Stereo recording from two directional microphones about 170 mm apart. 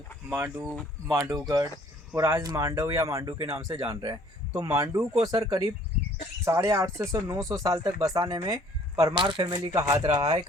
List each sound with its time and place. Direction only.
0.6 s speech: 5° left (ahead or behind)
1.0 s speech: 15° right (ahead or behind)